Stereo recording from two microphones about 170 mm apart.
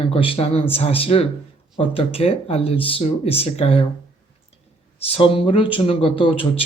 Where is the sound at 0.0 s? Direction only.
30° left (ahead or behind).